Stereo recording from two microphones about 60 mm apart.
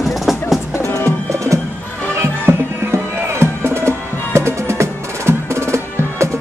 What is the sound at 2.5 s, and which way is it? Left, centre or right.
Music, right.